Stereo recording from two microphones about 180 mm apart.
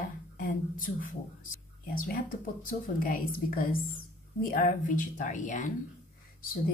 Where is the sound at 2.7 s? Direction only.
50° left (ahead or behind).